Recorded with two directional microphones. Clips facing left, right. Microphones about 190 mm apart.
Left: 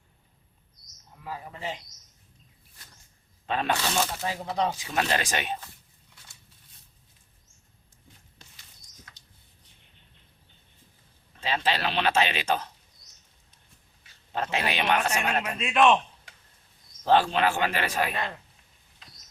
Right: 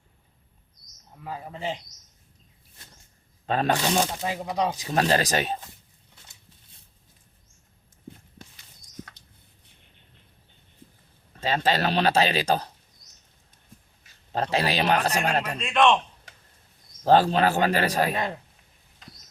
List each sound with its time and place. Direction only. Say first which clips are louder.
1.2 s speech: right 3 dB; 30° right (ahead or behind)
3.4 s a man's voice: right 4 dB; 40° right (ahead or behind)
4.0 s speech: right 2 dB; 15° right (ahead or behind)
4.8 s a man's voice: right 5 dB; 40° right (ahead or behind)
9.0 s a sound: right 14 dB; 60° right (ahead or behind)
11.3 s a man's voice: right 4 dB; 40° right (ahead or behind)
14.3 s a man's voice: right 4 dB; 35° right (ahead or behind)
15.5 s a man's voice: even; 5° left (ahead or behind)
17.0 s a man's voice: right 3 dB; 40° right (ahead or behind)